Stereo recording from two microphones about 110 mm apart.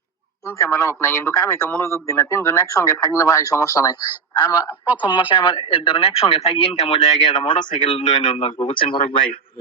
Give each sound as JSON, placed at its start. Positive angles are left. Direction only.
{"t": 0.4, "sound": "a man's voice", "side_deg": 25}
{"t": 8.0, "sound": "speech", "side_deg": 65}